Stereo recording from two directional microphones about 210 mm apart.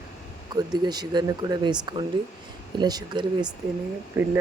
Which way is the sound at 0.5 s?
20° right (ahead or behind).